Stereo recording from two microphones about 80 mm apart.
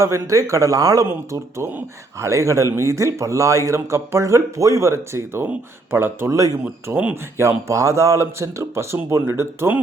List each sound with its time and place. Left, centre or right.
0.0 s a man's voice: right
1.0 s speech: right
6.3 s a man's voice: right
6.9 s speech: right